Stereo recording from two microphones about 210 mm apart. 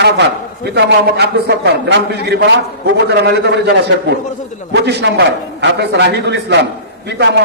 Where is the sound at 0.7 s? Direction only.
50° right (ahead or behind).